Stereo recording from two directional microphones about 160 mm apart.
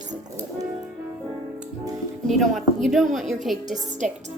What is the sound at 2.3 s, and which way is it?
A woman's voice, centre (ahead or behind).